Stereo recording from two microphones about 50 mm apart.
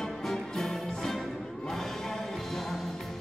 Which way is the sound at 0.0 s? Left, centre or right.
Centre.